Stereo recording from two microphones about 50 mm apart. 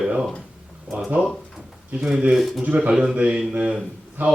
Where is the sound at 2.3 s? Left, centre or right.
Centre.